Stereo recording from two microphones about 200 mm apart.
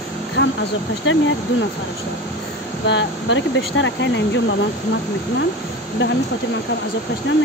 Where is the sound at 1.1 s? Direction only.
70° left (ahead or behind).